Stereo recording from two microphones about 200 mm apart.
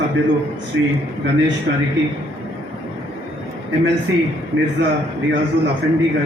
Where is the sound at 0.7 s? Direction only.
65° right (ahead or behind).